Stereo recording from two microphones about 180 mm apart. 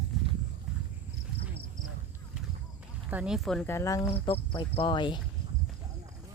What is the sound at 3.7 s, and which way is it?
Speech, 15° left (ahead or behind).